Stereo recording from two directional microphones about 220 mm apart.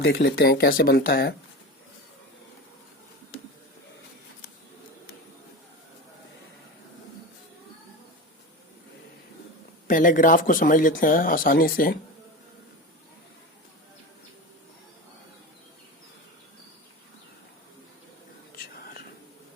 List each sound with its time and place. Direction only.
0.0 s speech: 50° left (ahead or behind)
9.8 s speech: 35° left (ahead or behind)
18.7 s whispering: 40° left (ahead or behind)